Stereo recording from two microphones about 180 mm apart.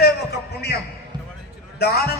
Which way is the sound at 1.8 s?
60° left (ahead or behind).